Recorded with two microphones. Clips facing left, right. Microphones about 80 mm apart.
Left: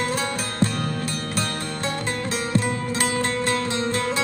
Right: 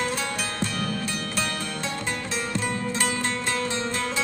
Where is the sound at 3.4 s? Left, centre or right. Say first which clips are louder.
Left 4 dB; left.